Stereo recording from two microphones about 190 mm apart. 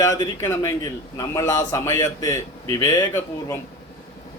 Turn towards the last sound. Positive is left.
turn(degrees=15)  # may be behind; listen again after turning